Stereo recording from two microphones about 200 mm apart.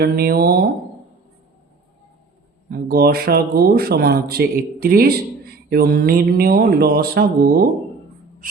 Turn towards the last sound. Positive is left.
turn(degrees=-50)  # may be behind; listen again after turning